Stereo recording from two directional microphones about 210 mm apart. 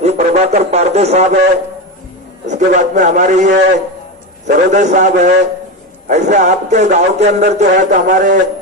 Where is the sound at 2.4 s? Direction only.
35° right (ahead or behind).